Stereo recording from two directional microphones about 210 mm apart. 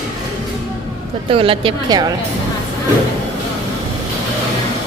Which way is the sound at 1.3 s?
25° right (ahead or behind).